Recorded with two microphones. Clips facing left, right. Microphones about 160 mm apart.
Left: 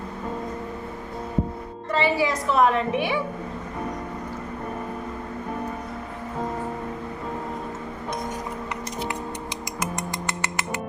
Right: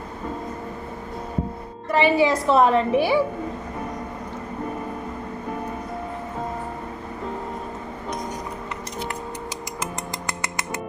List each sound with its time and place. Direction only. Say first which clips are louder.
1.9 s a woman's voice: right 4 dB; 15° right (ahead or behind)
2.2 s a woman's voice: right 3 dB; 30° right (ahead or behind)